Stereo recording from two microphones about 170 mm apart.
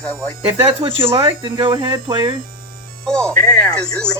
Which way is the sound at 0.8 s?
35° right (ahead or behind).